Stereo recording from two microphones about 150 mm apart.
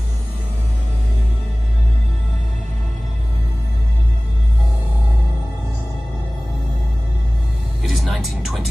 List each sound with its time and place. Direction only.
7.8 s music: centre (ahead or behind)